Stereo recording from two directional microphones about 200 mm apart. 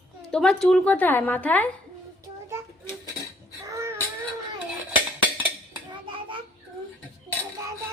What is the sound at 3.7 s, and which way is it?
Baby cry, 15° right (ahead or behind).